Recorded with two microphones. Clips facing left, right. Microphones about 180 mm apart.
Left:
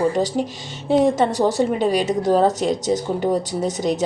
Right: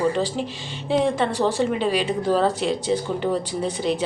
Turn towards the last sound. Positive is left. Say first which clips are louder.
# left 2 dB
turn(degrees=45)  # may be behind; listen again after turning